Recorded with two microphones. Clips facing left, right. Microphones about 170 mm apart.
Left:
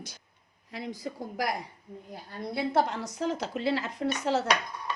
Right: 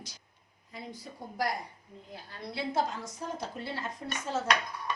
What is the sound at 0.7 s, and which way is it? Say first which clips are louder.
Speech: left 7 dB; 85° left.